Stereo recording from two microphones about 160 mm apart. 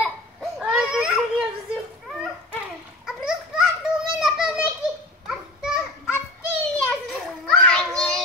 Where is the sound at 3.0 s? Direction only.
5° right (ahead or behind).